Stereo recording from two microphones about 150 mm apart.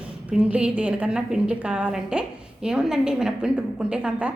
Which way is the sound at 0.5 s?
10° right (ahead or behind).